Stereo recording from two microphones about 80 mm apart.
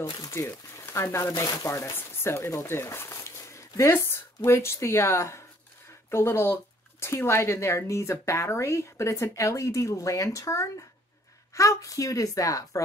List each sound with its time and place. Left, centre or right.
0.0 s speech: left
1.3 s speech: left
1.6 s a woman's voice: left